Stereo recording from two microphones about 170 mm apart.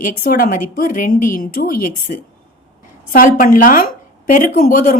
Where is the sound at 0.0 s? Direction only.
55° left (ahead or behind).